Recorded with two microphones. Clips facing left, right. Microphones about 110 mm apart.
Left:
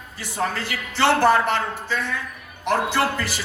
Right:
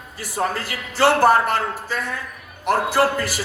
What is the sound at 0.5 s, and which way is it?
A man's voice, 40° right (ahead or behind).